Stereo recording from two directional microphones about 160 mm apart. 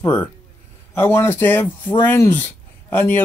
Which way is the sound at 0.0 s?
15° left (ahead or behind).